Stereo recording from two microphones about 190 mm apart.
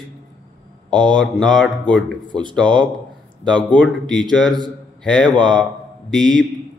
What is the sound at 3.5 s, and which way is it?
Speech, 5° left (ahead or behind).